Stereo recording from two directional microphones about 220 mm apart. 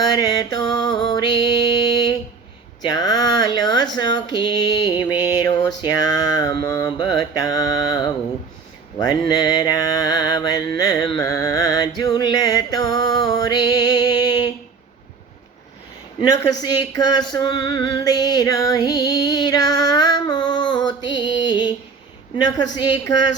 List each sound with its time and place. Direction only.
0.0 s music: 15° left (ahead or behind)
2.8 s a sound: 15° left (ahead or behind)
9.3 s mantra: 15° left (ahead or behind)
16.2 s a sound: 15° left (ahead or behind)
17.0 s female singing: 20° left (ahead or behind)
22.7 s speech: 20° left (ahead or behind)